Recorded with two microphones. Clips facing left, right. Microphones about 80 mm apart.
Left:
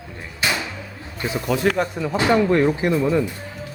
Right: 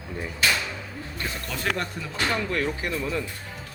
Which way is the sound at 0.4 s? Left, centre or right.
Centre.